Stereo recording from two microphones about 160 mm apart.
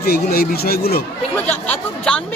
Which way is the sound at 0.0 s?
75° left (ahead or behind).